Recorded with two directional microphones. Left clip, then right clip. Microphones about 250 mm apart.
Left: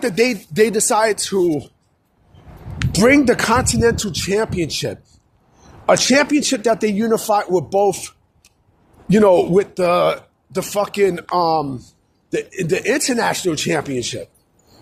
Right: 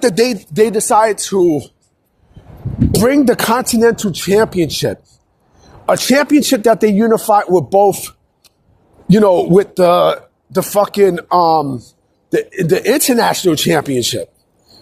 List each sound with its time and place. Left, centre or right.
0.0 s speech: centre
0.5 s speech: centre
1.4 s speech: right
2.9 s speech: right